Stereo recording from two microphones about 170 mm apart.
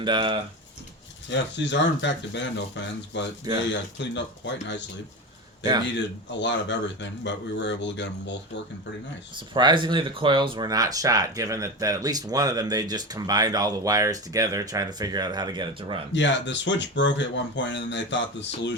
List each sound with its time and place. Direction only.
0.0 s speech: 25° right (ahead or behind)
1.3 s speech: 90° left
5.8 s speech: 90° left
9.6 s speech: 25° right (ahead or behind)
16.1 s speech: 90° left